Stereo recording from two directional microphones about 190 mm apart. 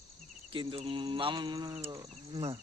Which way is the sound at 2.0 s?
30° right (ahead or behind).